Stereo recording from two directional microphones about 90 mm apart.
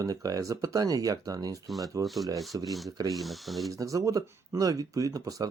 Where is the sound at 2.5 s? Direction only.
45° right (ahead or behind).